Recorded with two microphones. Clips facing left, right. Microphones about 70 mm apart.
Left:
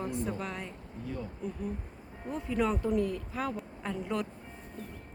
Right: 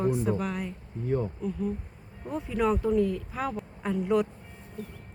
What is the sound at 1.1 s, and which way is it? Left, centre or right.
Speech, right.